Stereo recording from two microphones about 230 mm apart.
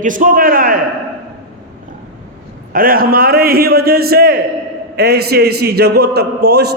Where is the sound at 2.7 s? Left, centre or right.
Right.